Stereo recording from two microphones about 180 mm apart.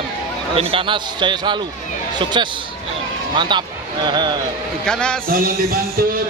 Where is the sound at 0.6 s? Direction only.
30° right (ahead or behind).